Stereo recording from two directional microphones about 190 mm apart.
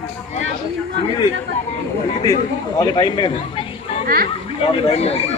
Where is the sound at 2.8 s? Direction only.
20° left (ahead or behind).